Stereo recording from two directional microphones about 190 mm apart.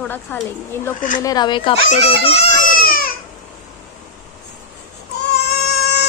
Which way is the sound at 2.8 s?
50° left (ahead or behind).